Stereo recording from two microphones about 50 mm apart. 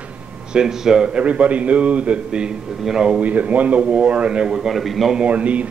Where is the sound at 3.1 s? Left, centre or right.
Right; by 5.1 s centre.